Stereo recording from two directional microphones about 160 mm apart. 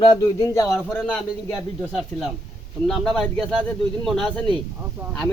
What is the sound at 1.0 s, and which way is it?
Speech, 5° right (ahead or behind).